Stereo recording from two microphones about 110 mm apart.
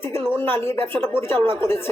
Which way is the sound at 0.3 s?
20° left (ahead or behind).